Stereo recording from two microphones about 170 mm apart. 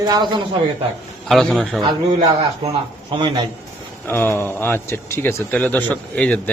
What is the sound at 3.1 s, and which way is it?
Speech, 30° right (ahead or behind).